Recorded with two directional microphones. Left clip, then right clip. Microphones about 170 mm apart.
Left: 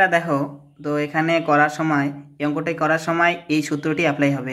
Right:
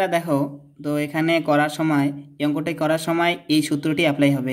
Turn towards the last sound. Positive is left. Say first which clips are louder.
# right 1 dB
turn(degrees=-45)  # may be behind; listen again after turning